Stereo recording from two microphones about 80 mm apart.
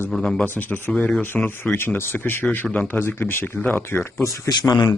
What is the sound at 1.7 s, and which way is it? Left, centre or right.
Speech, left.